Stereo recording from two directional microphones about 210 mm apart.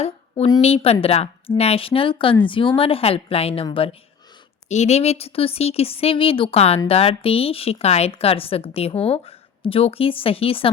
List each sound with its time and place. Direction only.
0.0 s speech: 25° left (ahead or behind)